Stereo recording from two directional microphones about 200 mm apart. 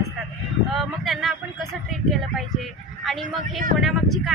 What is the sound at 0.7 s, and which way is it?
Speech, centre (ahead or behind).